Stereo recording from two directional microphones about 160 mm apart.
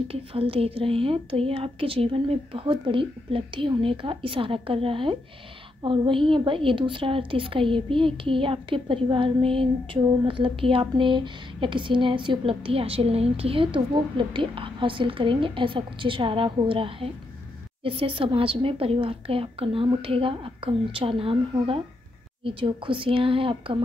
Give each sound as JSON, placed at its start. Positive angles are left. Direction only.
{"t": 0.1, "sound": "speech", "side_deg": -35}